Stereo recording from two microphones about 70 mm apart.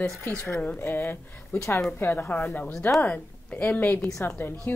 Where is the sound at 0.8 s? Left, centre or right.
Left.